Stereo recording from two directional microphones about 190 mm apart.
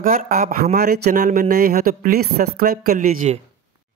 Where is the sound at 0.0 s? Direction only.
45° right (ahead or behind).